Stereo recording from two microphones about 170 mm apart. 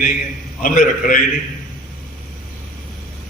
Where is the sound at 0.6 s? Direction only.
50° left (ahead or behind).